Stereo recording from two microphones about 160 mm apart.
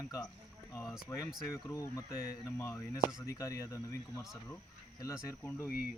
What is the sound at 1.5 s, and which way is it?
Speech, 20° left (ahead or behind).